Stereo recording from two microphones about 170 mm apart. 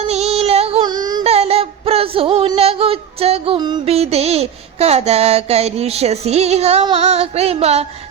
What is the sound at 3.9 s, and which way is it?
Female singing, 40° right (ahead or behind).